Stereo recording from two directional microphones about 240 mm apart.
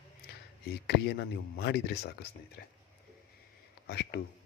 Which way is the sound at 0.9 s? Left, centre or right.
Left.